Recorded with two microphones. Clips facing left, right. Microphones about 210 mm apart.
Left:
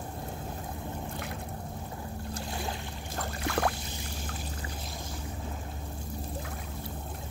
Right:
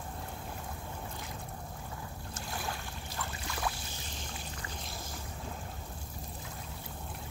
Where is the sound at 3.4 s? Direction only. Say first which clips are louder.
Left 9 dB; 65° left (ahead or behind).